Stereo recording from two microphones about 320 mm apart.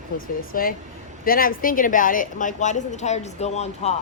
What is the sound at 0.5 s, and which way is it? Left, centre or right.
A woman's voice, left.